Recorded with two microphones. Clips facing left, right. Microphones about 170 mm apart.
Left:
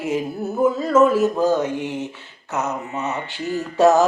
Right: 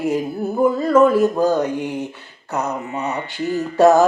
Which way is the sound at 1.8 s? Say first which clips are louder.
Right 2 dB; 15° right (ahead or behind).